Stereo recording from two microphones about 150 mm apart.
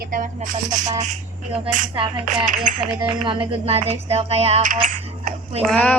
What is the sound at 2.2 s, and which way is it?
Music, 55° right (ahead or behind).